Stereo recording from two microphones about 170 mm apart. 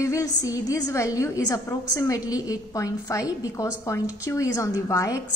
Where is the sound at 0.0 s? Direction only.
20° left (ahead or behind).